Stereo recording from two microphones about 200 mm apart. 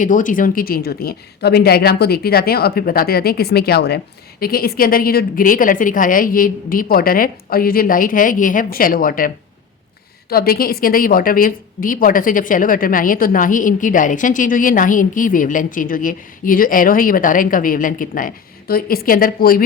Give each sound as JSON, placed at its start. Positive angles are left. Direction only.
{"t": 0.0, "sound": "a woman's voice", "side_deg": 40}